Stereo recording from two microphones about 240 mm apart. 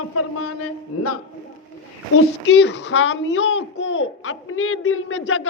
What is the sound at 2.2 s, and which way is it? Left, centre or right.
A child's voice, left.